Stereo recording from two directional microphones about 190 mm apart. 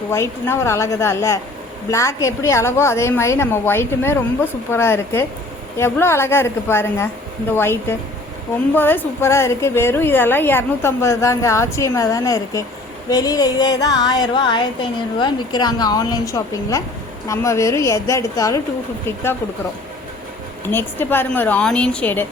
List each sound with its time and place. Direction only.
0.1 s a woman's voice: 15° left (ahead or behind)
13.1 s a sound: 20° left (ahead or behind)
17.2 s a woman's voice: 15° left (ahead or behind)
20.7 s a woman's voice: 10° left (ahead or behind)